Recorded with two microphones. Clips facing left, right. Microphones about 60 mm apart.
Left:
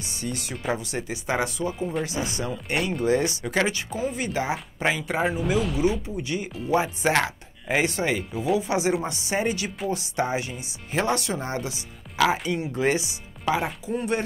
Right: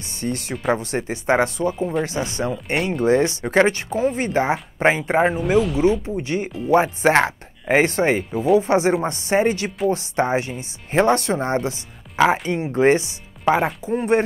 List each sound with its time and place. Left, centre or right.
0.2 s speech: right
2.2 s speech: centre
3.0 s speech: right
5.4 s speech: centre
6.0 s speech: right